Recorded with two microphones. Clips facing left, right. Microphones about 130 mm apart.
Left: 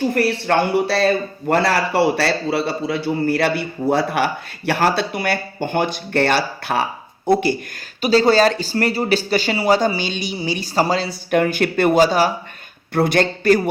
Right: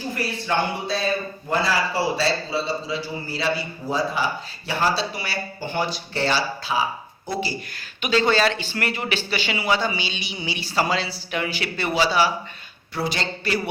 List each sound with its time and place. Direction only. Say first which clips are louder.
0.1 s a man's voice: left 8 dB; 70° left (ahead or behind)
8.0 s a man's voice: left 6 dB; 35° left (ahead or behind)